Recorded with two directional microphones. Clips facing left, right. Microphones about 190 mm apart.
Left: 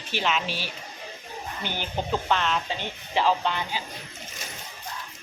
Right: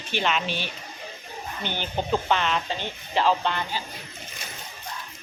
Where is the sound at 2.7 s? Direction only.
10° left (ahead or behind).